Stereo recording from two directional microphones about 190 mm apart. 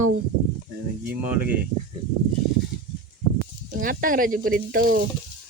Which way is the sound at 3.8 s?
45° right (ahead or behind).